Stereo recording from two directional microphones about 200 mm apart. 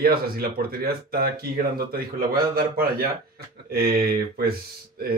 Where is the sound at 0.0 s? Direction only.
50° right (ahead or behind).